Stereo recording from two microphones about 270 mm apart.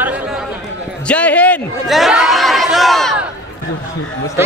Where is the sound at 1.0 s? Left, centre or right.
Centre.